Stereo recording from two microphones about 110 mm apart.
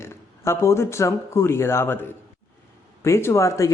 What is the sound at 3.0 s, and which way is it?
Speech, 25° left (ahead or behind).